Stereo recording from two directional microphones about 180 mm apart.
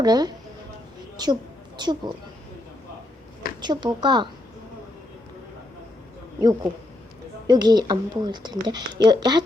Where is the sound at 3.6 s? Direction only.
25° right (ahead or behind).